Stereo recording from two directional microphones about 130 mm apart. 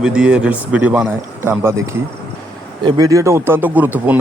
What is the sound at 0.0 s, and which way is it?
Speech, 10° right (ahead or behind).